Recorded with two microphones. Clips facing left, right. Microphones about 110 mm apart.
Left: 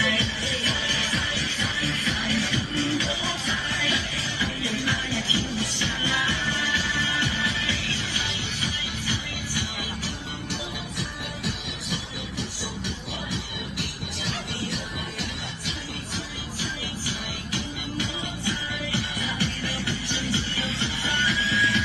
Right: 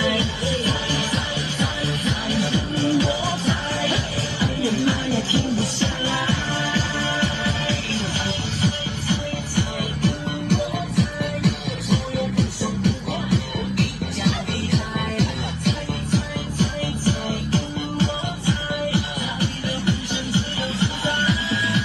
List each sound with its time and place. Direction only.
0.0 s music: 30° right (ahead or behind)
9.6 s music: 60° right (ahead or behind)
11.9 s music: 70° right (ahead or behind); by 17.6 s 50° right (ahead or behind)
17.9 s music: 30° right (ahead or behind)